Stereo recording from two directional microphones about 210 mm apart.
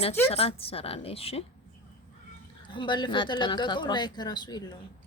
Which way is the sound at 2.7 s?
20° left (ahead or behind).